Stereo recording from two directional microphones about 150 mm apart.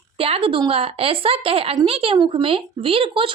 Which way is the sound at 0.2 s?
40° right (ahead or behind).